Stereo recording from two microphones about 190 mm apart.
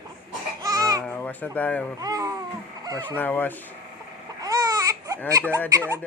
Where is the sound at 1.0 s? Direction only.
10° left (ahead or behind).